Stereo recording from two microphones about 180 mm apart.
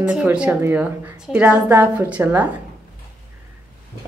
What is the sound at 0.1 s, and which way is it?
Speech, 5° right (ahead or behind).